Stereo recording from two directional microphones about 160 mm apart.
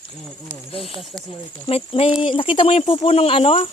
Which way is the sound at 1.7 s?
40° left (ahead or behind).